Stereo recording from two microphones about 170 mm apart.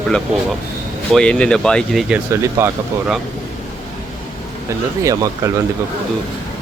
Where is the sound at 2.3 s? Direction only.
15° right (ahead or behind).